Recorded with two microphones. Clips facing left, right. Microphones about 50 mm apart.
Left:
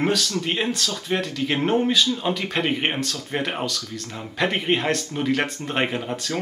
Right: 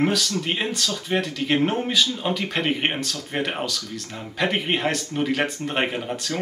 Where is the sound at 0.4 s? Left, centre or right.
Centre.